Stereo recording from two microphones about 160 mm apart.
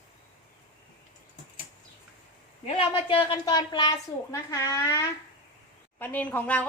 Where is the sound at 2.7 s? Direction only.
35° left (ahead or behind).